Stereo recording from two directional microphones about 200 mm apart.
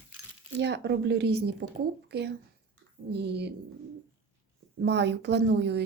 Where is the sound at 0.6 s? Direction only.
55° right (ahead or behind).